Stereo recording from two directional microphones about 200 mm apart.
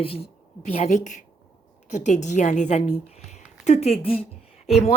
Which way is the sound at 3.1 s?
35° left (ahead or behind).